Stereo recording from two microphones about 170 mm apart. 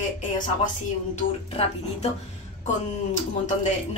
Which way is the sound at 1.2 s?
40° left (ahead or behind).